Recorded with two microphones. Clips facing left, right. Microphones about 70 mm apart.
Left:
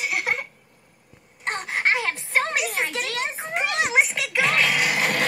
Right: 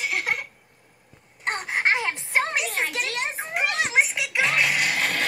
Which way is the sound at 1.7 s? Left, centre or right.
Right.